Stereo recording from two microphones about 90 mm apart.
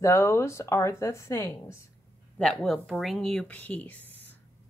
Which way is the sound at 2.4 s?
5° left (ahead or behind).